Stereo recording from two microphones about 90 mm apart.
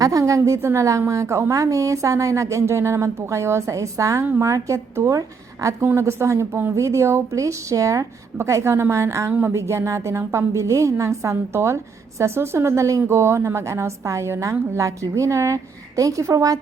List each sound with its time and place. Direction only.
0.0 s a woman's voice: 40° right (ahead or behind)